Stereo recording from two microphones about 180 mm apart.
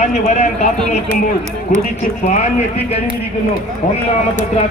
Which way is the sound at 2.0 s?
40° left (ahead or behind).